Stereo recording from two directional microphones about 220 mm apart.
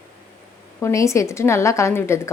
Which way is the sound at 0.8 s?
15° left (ahead or behind).